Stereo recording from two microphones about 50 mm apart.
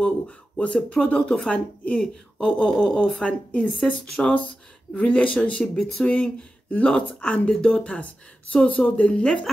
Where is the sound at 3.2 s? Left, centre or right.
Left.